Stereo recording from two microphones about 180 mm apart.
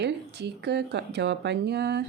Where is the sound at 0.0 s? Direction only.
70° right (ahead or behind).